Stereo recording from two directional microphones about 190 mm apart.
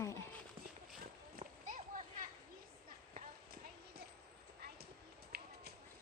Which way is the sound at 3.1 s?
55° right (ahead or behind).